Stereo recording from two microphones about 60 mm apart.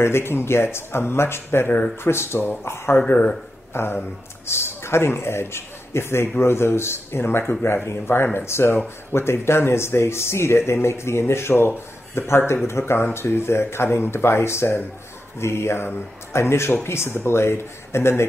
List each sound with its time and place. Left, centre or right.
0.0 s speech: left
3.1 s speech: left
3.7 s a man's voice: left